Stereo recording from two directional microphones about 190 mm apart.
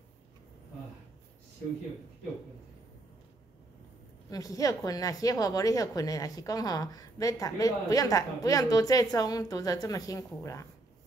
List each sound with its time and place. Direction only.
4.3 s a woman's voice: 20° left (ahead or behind)